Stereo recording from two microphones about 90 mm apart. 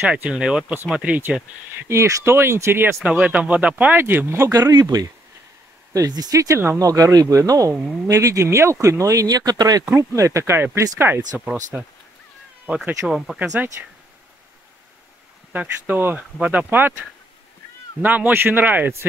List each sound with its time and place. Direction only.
0.1 s speech: 10° right (ahead or behind); by 3.0 s 30° right (ahead or behind)
3.0 s speech: 15° right (ahead or behind)
4.5 s speech: 40° right (ahead or behind)
4.7 s speech: 50° right (ahead or behind)
9.9 s speech: 35° right (ahead or behind); by 12.9 s 20° right (ahead or behind)
13.0 s speech: 5° right (ahead or behind)
13.6 s speech: 20° right (ahead or behind)
15.5 s speech: 20° right (ahead or behind)
18.0 s speech: 20° right (ahead or behind)